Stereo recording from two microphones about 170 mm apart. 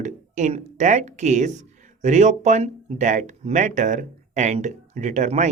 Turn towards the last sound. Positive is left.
turn(degrees=-45)  # may be behind; listen again after turning